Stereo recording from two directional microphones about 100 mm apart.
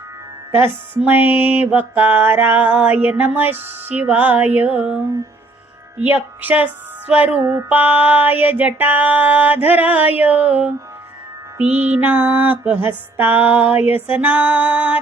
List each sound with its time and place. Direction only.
0.5 s music: 20° right (ahead or behind)
1.4 s mantra: 20° right (ahead or behind)
6.0 s mantra: 15° right (ahead or behind)
7.4 s music: 30° right (ahead or behind)
7.7 s mantra: 15° right (ahead or behind)